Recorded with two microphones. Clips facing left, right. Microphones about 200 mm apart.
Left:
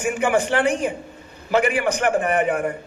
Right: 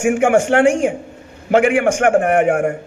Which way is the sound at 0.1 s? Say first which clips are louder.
Right 6 dB; 50° right (ahead or behind).